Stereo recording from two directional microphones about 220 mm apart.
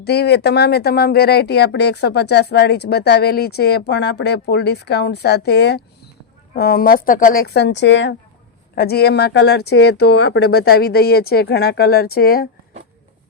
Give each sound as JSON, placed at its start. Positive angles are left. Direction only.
{"t": 0.0, "sound": "speech", "side_deg": 50}